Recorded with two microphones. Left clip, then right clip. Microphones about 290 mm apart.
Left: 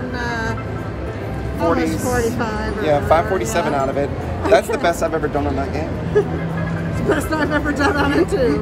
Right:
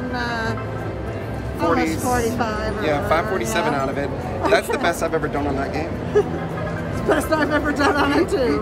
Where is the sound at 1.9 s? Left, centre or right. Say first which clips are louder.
Left 1 dB; centre.